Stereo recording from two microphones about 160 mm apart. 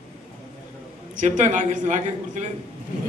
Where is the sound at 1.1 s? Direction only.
50° right (ahead or behind).